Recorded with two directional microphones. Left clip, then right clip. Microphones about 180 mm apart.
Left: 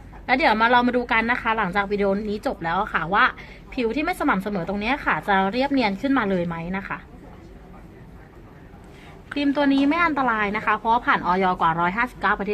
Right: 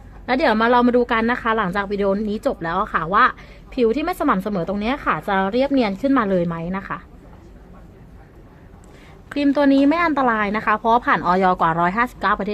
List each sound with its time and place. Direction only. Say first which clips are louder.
0.3 s a woman's voice: right 1 dB; 55° right (ahead or behind)
9.3 s a woman's voice: right 4 dB; 55° right (ahead or behind)